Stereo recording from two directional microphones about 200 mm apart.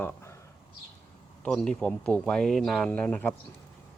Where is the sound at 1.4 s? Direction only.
5° left (ahead or behind).